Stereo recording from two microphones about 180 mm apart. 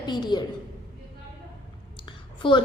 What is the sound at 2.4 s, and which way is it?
Speech, 25° left (ahead or behind).